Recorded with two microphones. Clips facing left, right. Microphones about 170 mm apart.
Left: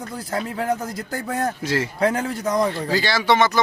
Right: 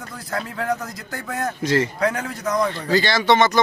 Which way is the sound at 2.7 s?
10° left (ahead or behind).